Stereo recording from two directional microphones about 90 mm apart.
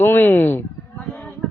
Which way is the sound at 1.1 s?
10° left (ahead or behind).